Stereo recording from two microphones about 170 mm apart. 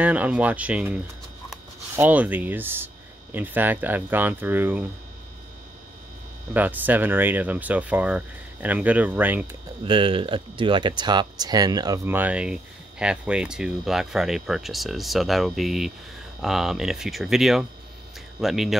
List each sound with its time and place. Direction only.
0.0 s speech: 10° right (ahead or behind)
6.5 s speech: 10° right (ahead or behind)
9.8 s speech: 30° right (ahead or behind); by 18.8 s centre (ahead or behind)